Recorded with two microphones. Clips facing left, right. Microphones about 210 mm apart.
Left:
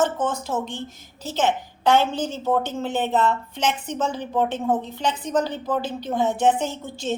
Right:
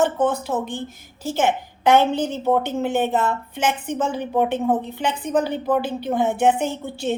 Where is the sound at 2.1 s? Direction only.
60° right (ahead or behind).